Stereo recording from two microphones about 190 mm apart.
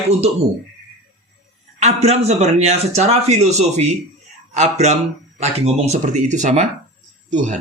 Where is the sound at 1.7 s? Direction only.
35° right (ahead or behind).